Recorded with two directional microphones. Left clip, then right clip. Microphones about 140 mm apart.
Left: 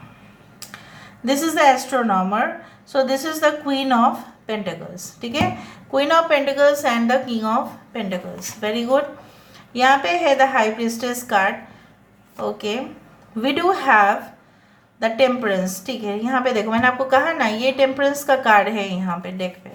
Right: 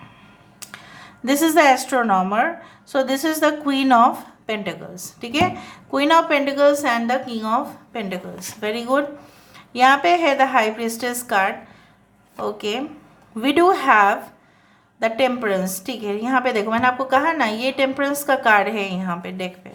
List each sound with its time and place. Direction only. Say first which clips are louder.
0.6 s a woman's voice: even; 35° right (ahead or behind)